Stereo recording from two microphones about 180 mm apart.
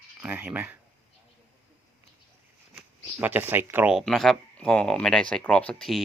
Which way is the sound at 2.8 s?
10° right (ahead or behind).